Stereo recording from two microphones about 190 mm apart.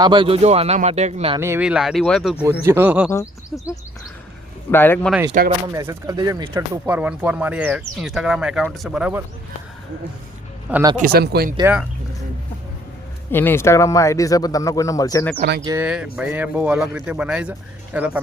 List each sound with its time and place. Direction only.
0.0 s speech: 25° right (ahead or behind)
1.4 s speech: 10° right (ahead or behind)
2.4 s speech: 10° right (ahead or behind)
3.1 s speech: 15° left (ahead or behind)
5.3 s speech: 45° right (ahead or behind)
5.7 s speech: 15° right (ahead or behind)
6.9 s speech: 5° right (ahead or behind)
10.9 s speech: 55° right (ahead or behind)
11.6 s speech: 5° right (ahead or behind)
13.3 s speech: 10° left (ahead or behind)
15.4 s speech: 55° right (ahead or behind)
15.8 s speech: 5° right (ahead or behind)